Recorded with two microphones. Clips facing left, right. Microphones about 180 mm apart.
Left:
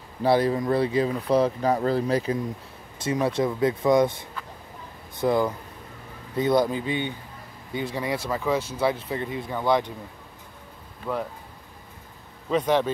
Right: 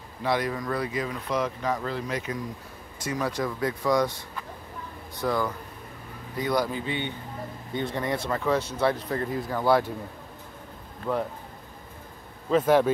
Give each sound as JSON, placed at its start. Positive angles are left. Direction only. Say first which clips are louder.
{"t": 0.2, "sound": "speech", "louder": "left 6 dB", "side_deg": 30}
{"t": 5.2, "sound": "speech", "louder": "left 4 dB", "side_deg": 20}
{"t": 11.1, "sound": "speech", "louder": "right 1 dB", "side_deg": -5}
{"t": 12.4, "sound": "speech", "louder": "right 2 dB", "side_deg": -5}